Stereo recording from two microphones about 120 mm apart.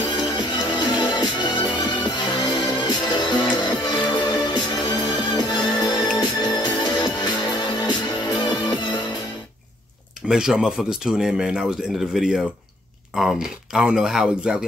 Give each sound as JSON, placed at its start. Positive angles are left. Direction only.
{"t": 0.4, "sound": "music", "side_deg": 35}
{"t": 10.2, "sound": "speech", "side_deg": -5}